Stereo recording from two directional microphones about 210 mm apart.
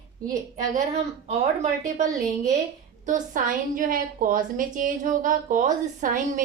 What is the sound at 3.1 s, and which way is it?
A woman's voice, 40° right (ahead or behind).